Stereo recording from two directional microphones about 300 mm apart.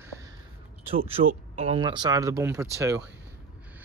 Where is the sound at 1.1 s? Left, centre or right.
Right.